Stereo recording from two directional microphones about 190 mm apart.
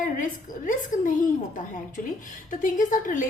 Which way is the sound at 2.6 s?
45° left (ahead or behind).